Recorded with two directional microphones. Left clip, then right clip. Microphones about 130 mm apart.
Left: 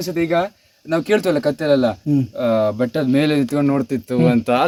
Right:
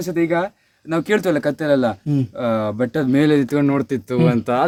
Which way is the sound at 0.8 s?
50° right (ahead or behind).